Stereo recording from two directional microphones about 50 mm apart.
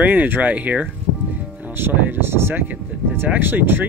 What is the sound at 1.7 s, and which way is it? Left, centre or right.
Speech, right.